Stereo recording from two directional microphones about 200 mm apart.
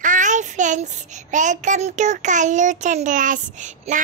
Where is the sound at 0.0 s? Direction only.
40° right (ahead or behind).